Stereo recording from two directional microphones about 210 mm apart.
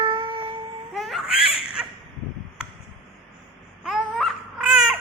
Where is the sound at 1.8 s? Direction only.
5° right (ahead or behind).